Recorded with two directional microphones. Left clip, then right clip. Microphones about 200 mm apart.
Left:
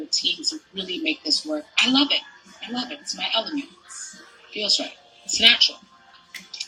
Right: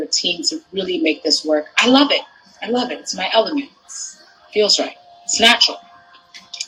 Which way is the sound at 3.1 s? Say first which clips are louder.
Right 6 dB; 40° right (ahead or behind).